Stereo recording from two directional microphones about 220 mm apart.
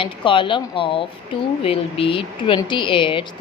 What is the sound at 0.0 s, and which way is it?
Speech, 20° left (ahead or behind).